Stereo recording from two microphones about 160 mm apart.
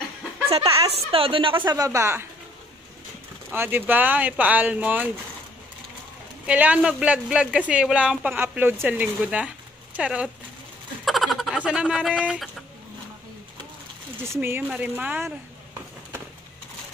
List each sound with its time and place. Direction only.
0.7 s a woman's voice: 35° right (ahead or behind)
1.7 s speech: 20° right (ahead or behind)
3.5 s speech: 15° right (ahead or behind)
6.4 s speech: 10° right (ahead or behind)
14.2 s speech: 15° right (ahead or behind)